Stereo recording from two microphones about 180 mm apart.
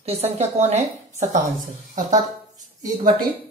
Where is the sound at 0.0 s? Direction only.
35° right (ahead or behind).